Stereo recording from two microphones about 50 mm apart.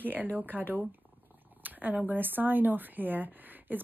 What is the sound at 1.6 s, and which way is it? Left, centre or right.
Purr, right.